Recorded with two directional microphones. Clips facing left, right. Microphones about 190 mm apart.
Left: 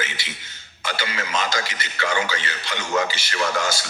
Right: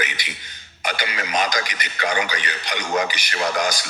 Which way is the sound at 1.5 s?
15° right (ahead or behind).